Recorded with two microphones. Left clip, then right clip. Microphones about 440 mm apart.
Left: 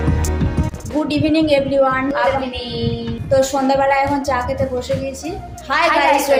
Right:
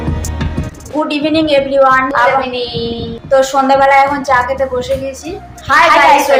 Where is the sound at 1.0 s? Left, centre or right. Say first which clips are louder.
Right 3 dB; left.